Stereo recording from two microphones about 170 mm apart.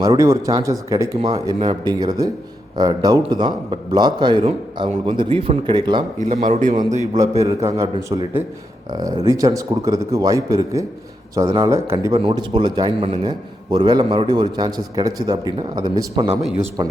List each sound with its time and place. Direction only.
0.0 s a man's voice: 20° right (ahead or behind)
6.1 s a man's voice: 45° right (ahead or behind)
7.3 s a man's voice: 20° right (ahead or behind)